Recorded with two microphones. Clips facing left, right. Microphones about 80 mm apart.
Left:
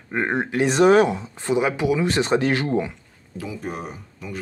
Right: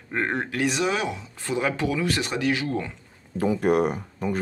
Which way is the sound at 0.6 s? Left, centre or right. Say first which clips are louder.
Left 12 dB; left.